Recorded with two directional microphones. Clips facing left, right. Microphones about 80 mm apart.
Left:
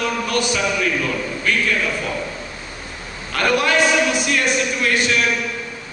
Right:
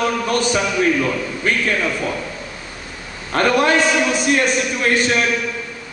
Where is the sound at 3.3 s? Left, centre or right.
Right.